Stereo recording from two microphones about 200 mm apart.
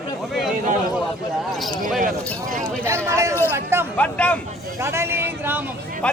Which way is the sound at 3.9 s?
5° left (ahead or behind).